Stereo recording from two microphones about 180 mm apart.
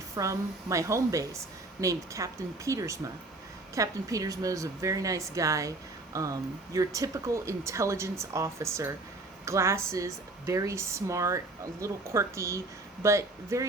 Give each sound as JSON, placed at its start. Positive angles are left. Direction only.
{"t": 0.2, "sound": "speech", "side_deg": -15}